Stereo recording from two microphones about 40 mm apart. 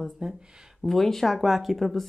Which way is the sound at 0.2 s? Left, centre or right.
Centre.